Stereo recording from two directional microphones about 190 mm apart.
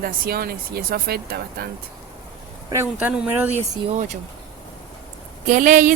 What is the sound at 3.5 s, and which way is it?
Speech, 40° right (ahead or behind).